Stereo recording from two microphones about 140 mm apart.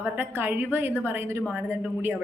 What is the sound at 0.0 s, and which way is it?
A woman's voice, 15° right (ahead or behind).